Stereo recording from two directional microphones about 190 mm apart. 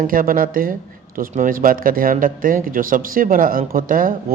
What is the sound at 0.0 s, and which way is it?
Speech, 45° right (ahead or behind).